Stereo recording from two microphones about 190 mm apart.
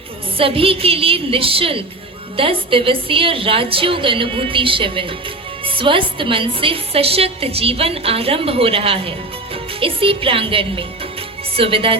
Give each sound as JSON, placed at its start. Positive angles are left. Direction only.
{"t": 0.3, "sound": "a woman's voice", "side_deg": -30}